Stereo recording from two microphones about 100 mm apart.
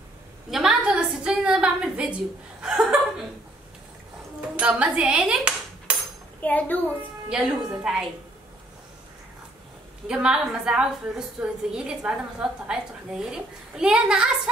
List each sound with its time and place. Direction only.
0.5 s a sound: 5° right (ahead or behind)
2.6 s chuckle: 5° right (ahead or behind)
4.6 s dishes: 10° right (ahead or behind)
6.4 s a child's voice: 15° left (ahead or behind)
7.0 s a woman's voice: 5° right (ahead or behind)
10.0 s a woman's voice: 10° right (ahead or behind)